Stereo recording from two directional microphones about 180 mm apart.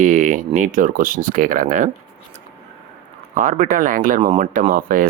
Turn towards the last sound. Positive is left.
turn(degrees=-50)  # may be behind; listen again after turning